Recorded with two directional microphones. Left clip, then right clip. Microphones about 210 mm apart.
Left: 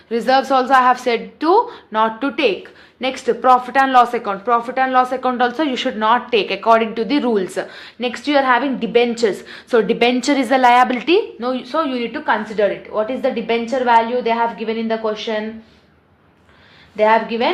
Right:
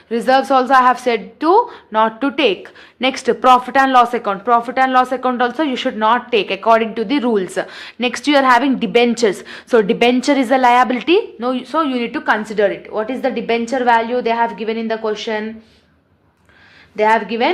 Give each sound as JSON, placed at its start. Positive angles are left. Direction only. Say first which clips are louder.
{"t": 0.1, "sound": "speech", "louder": "right 2 dB", "side_deg": -20}
{"t": 17.0, "sound": "a woman's voice", "louder": "even", "side_deg": -40}